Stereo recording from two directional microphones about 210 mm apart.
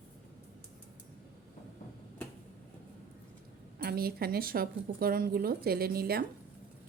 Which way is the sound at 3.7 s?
45° right (ahead or behind).